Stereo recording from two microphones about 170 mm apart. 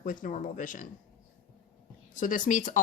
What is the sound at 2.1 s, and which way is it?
Speech, 50° left (ahead or behind).